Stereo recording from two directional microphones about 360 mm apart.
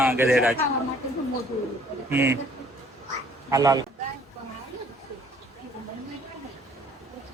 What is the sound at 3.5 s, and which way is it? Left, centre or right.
Speech, centre.